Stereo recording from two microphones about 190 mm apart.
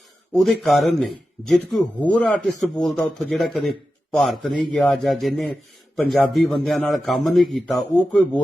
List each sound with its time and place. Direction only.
0.3 s a man's voice: centre (ahead or behind)